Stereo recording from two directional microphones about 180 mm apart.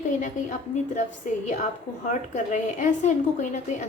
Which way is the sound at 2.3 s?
40° left (ahead or behind).